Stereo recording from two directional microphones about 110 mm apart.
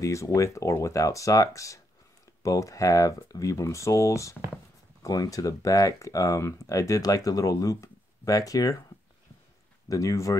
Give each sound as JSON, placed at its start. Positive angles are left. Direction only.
{"t": 0.0, "sound": "speech", "side_deg": 30}
{"t": 9.8, "sound": "speech", "side_deg": 30}